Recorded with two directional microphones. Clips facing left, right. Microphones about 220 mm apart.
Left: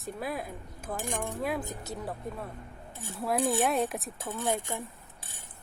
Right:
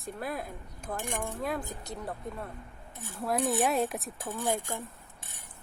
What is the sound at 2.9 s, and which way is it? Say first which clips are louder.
Cutlery: left 2 dB; 25° left (ahead or behind).